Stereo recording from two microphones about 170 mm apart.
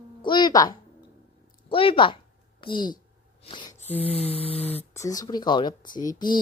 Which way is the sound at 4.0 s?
35° right (ahead or behind).